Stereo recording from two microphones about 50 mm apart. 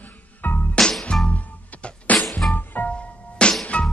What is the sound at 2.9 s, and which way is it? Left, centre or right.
Music, left.